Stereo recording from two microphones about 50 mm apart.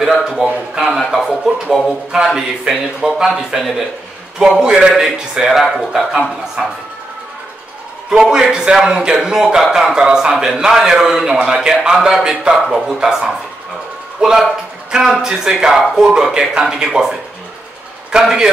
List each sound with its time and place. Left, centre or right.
0.0 s speech: centre
0.9 s a sound: centre
2.2 s speech: centre
4.4 s speech: centre
8.1 s speech: centre
12.5 s speech: centre
18.2 s speech: centre